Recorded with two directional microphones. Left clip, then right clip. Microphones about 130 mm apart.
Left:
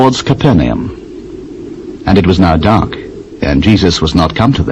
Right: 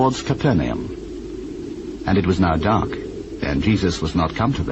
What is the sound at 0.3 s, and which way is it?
Speech, 30° left (ahead or behind).